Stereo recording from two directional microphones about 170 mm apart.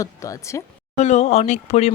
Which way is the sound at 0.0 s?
20° left (ahead or behind).